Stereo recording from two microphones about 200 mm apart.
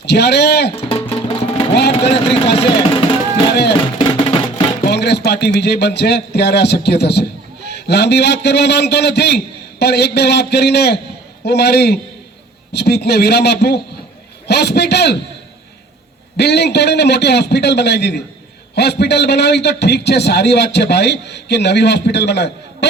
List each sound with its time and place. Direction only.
0.0 s a man's voice: 55° left (ahead or behind)
2.0 s speech: 30° left (ahead or behind)
3.7 s music: 25° left (ahead or behind)
4.8 s a man's voice: 55° left (ahead or behind)
16.4 s a man's voice: 55° left (ahead or behind)